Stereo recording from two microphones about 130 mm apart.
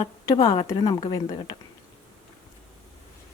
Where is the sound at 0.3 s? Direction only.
30° left (ahead or behind).